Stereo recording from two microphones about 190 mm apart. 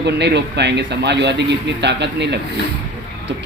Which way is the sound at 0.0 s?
65° right (ahead or behind).